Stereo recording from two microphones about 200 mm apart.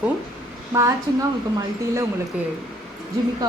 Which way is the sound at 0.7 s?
15° right (ahead or behind).